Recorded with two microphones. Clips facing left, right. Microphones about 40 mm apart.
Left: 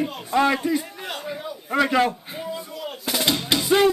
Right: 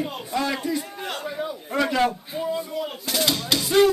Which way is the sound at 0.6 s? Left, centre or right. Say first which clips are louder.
Left 3 dB; centre.